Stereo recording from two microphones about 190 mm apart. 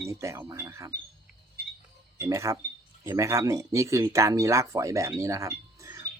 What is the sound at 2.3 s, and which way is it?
Speech, 15° right (ahead or behind).